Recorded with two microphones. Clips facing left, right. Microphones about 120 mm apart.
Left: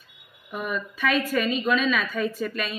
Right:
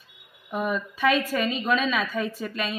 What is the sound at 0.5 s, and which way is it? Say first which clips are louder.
A woman's voice: right 3 dB; 30° right (ahead or behind).